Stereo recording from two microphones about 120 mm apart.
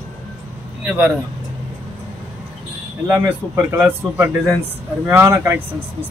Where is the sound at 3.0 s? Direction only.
20° right (ahead or behind).